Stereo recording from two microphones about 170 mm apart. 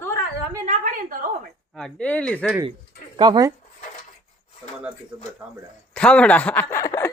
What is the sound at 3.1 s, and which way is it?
Speech, 25° right (ahead or behind).